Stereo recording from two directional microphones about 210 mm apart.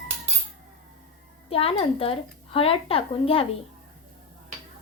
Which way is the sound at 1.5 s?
25° left (ahead or behind).